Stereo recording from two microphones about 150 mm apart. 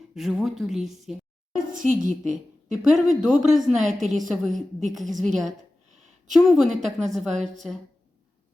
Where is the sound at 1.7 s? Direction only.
60° right (ahead or behind).